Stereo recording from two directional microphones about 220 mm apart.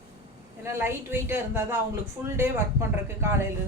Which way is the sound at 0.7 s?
10° right (ahead or behind).